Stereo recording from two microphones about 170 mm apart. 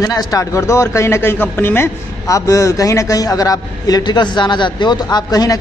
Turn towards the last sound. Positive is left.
turn(degrees=20)  # may be behind; listen again after turning